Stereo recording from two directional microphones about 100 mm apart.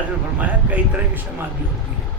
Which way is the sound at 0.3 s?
15° right (ahead or behind).